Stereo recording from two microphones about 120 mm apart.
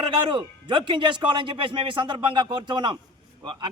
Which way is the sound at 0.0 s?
45° right (ahead or behind).